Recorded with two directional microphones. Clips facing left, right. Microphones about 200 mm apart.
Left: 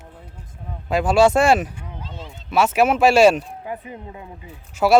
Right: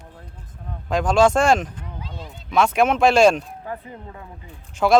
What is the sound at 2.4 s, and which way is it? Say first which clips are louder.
Speech: left 1 dB; 5° left (ahead or behind).